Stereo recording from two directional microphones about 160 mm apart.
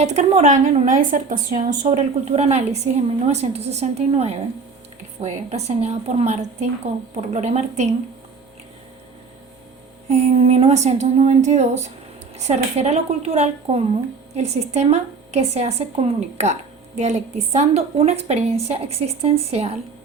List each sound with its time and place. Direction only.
0.0 s a woman's voice: 45° right (ahead or behind)
1.9 s a woman's voice: 40° right (ahead or behind)
10.1 s a woman's voice: 45° right (ahead or behind)